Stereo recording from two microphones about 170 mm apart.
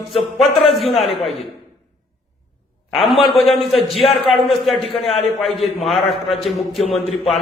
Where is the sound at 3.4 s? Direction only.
35° left (ahead or behind).